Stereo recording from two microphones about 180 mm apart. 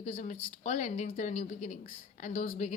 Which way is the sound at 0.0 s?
40° left (ahead or behind).